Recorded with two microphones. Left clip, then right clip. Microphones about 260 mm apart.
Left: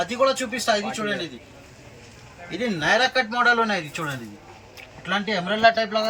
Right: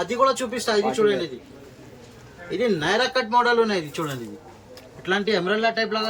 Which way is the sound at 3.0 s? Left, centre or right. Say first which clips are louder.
Even; centre.